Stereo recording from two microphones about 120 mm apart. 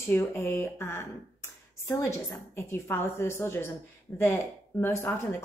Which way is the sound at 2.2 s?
20° left (ahead or behind).